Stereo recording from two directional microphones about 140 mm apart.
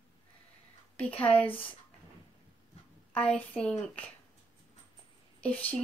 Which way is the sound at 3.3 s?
10° left (ahead or behind).